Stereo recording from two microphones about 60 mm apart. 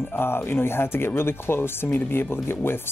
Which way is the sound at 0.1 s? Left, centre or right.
Left.